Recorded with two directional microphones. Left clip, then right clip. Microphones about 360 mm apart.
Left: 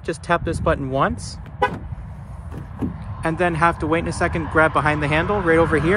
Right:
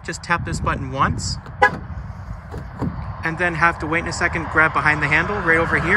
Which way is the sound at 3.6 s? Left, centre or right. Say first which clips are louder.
Right 2 dB; centre.